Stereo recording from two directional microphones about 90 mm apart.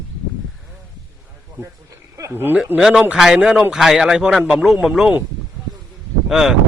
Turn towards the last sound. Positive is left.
turn(degrees=-5)  # may be behind; listen again after turning